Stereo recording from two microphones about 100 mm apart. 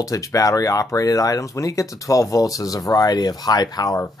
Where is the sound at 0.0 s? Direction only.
35° left (ahead or behind).